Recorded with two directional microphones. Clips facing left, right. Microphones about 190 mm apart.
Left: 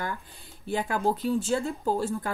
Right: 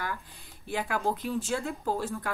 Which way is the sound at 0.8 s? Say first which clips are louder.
Left 4 dB; 30° left (ahead or behind).